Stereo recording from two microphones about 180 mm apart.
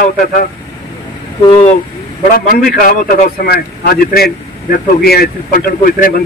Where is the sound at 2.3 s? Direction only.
55° left (ahead or behind).